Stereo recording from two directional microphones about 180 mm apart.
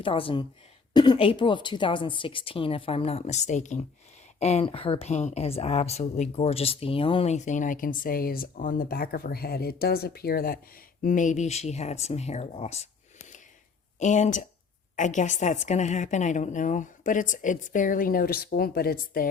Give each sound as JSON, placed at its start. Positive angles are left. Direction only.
{"t": 0.0, "sound": "speech", "side_deg": 30}
{"t": 14.0, "sound": "speech", "side_deg": 45}